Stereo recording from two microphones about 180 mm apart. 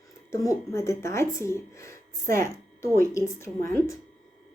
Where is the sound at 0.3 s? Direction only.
15° left (ahead or behind).